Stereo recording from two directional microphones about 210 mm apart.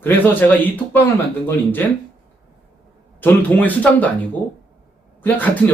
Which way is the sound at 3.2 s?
10° left (ahead or behind).